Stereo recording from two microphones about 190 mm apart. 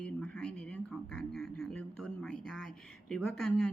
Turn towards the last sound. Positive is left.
turn(degrees=5)  # may be behind; listen again after turning